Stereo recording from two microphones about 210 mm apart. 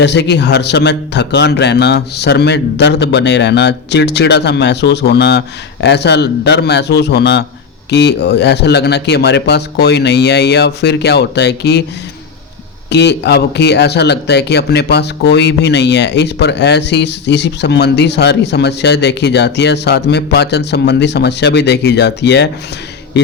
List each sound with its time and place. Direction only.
0.0 s speech: 55° left (ahead or behind)
12.9 s speech: 55° left (ahead or behind)